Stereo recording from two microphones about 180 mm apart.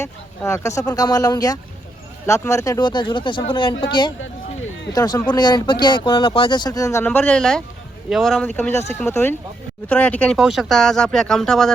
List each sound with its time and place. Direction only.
0.0 s speech: 15° left (ahead or behind)
4.9 s speech: 20° left (ahead or behind); by 11.7 s centre (ahead or behind)